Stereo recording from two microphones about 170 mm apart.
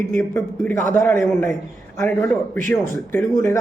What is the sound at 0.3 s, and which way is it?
Speech, 10° left (ahead or behind).